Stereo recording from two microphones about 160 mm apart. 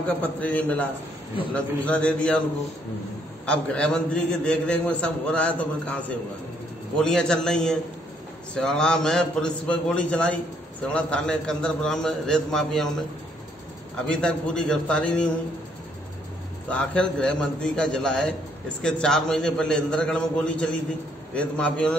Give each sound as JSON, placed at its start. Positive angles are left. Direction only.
{"t": 0.0, "sound": "a man's voice", "side_deg": 10}
{"t": 3.4, "sound": "a man's voice", "side_deg": 5}
{"t": 14.1, "sound": "a man's voice", "side_deg": 5}
{"t": 16.6, "sound": "a man's voice", "side_deg": 5}